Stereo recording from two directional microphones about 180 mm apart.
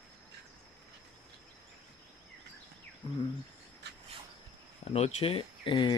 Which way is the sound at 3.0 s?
30° left (ahead or behind).